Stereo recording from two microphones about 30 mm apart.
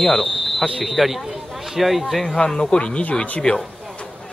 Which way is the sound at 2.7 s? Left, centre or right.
Left.